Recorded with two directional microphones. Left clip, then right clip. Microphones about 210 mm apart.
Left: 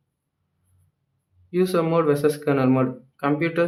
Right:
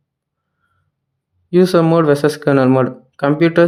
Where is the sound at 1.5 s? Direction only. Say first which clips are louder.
Right 9 dB; 40° right (ahead or behind).